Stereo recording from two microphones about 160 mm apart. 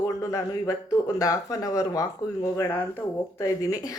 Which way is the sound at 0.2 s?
20° left (ahead or behind).